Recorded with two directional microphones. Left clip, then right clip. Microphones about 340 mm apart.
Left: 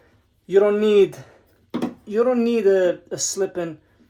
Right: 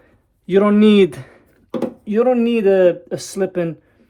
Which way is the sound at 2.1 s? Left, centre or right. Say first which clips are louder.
Right 4 dB; right.